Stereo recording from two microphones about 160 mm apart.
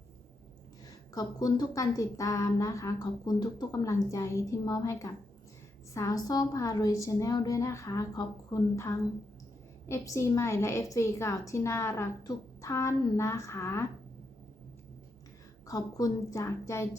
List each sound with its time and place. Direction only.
0.9 s a woman's voice: 25° left (ahead or behind)
15.6 s speech: 20° left (ahead or behind)